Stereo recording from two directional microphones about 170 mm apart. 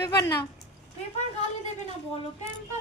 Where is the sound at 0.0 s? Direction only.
20° left (ahead or behind).